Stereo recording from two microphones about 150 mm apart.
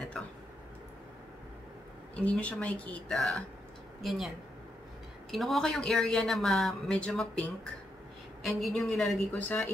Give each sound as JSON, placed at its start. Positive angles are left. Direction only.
{"t": 2.1, "sound": "speech", "side_deg": 10}
{"t": 5.3, "sound": "a woman's voice", "side_deg": 0}